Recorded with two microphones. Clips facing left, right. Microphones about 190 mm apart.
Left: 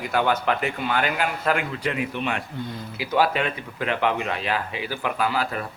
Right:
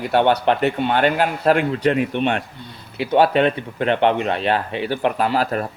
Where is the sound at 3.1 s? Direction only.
30° right (ahead or behind).